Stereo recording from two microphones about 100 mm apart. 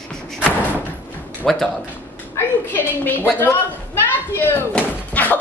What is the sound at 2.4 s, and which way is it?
A woman's voice, 20° left (ahead or behind).